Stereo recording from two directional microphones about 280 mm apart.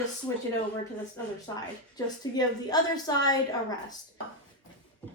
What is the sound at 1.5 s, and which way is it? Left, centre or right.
Speech, centre.